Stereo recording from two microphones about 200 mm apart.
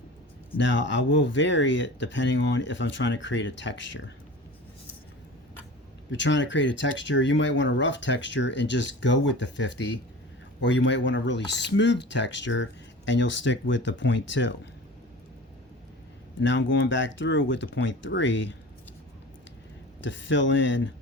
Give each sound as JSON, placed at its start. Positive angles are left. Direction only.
{"t": 0.5, "sound": "speech", "side_deg": 65}
{"t": 6.1, "sound": "speech", "side_deg": 65}
{"t": 16.4, "sound": "speech", "side_deg": 65}
{"t": 20.0, "sound": "speech", "side_deg": 65}